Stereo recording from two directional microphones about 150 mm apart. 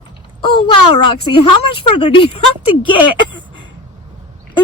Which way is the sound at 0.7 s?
35° left (ahead or behind).